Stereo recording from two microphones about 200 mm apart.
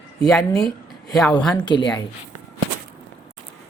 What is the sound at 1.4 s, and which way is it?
Speech, 5° left (ahead or behind).